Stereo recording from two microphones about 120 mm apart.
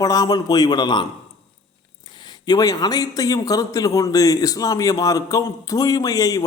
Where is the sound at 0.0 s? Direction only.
30° left (ahead or behind).